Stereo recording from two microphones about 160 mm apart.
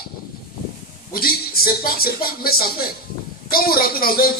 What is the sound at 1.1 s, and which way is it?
A man's voice, 65° left (ahead or behind).